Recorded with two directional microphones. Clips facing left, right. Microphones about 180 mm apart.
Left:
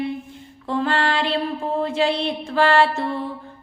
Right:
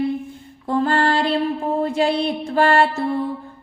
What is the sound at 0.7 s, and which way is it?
Music, 40° right (ahead or behind).